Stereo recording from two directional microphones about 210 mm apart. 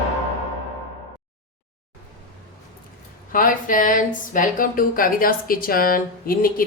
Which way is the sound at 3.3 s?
40° left (ahead or behind).